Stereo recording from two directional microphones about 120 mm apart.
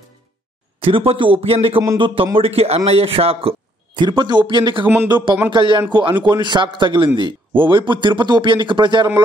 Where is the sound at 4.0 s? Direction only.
40° right (ahead or behind).